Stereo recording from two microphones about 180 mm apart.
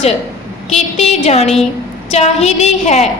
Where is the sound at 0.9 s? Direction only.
35° left (ahead or behind).